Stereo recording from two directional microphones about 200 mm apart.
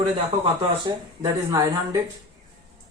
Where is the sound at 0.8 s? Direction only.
20° right (ahead or behind).